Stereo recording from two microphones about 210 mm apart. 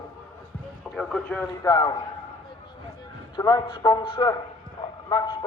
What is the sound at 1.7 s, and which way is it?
Speech, 20° left (ahead or behind).